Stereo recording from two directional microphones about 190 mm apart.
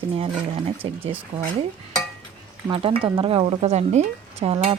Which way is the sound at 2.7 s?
30° right (ahead or behind).